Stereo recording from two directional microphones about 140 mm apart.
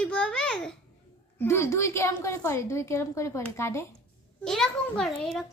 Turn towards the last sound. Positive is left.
turn(degrees=0)  # may be behind; listen again after turning